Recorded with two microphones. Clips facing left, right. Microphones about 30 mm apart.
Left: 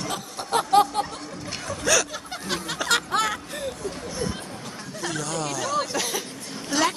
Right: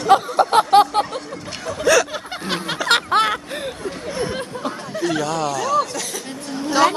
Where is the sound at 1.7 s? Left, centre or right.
Centre.